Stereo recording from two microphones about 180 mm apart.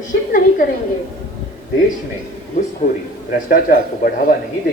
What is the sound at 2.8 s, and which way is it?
A woman's voice, 50° left (ahead or behind).